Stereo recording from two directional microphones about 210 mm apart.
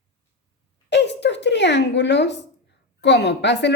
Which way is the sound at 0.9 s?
55° left (ahead or behind).